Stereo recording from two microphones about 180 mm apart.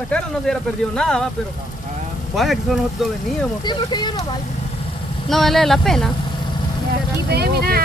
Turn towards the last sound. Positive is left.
turn(degrees=-60)  # may be behind; listen again after turning